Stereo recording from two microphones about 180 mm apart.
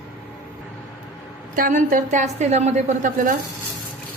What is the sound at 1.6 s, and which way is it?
A woman's voice, 50° right (ahead or behind).